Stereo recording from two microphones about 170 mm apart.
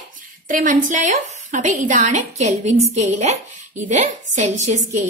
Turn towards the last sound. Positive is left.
turn(degrees=-40)  # may be behind; listen again after turning